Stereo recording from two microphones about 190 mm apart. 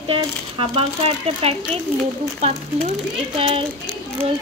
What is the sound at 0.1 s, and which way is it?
A woman's voice, 30° right (ahead or behind).